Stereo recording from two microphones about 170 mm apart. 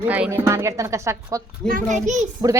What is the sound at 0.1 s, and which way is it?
Speech, 10° right (ahead or behind).